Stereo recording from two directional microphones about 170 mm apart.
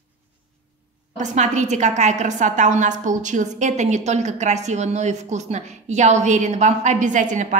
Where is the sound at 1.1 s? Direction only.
45° right (ahead or behind).